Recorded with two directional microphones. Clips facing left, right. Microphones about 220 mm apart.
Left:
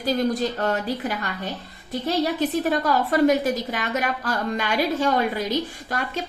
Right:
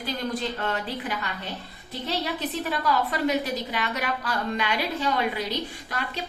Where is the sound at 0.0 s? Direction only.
40° left (ahead or behind).